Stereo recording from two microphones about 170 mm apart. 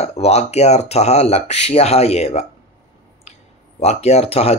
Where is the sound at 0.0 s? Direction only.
40° left (ahead or behind).